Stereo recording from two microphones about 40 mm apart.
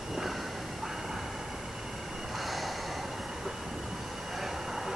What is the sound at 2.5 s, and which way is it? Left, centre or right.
Snort, centre.